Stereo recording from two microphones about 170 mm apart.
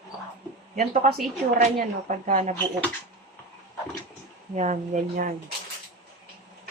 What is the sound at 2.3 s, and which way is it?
Speech, 45° right (ahead or behind).